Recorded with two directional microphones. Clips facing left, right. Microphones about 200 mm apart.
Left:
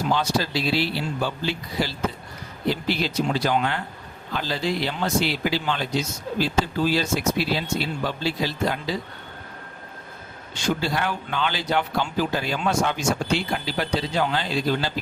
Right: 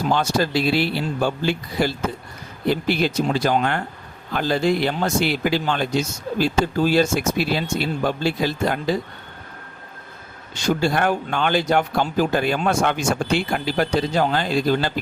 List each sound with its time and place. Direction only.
0.1 s speech: 50° right (ahead or behind)
10.5 s speech: 45° right (ahead or behind)